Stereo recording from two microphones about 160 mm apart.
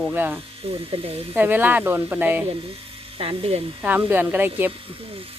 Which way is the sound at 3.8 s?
10° right (ahead or behind).